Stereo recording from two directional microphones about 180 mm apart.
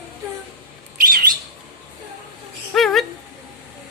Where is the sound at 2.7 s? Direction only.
Centre (ahead or behind).